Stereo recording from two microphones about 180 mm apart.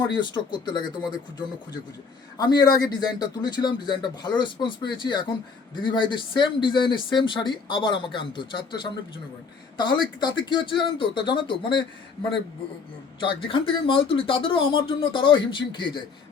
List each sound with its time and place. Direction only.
0.2 s speech: 25° left (ahead or behind)
13.1 s speech: 30° left (ahead or behind)